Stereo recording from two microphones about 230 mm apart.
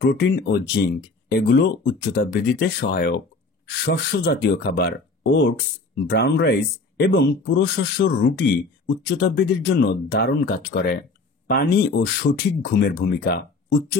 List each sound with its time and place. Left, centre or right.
0.0 s speech: left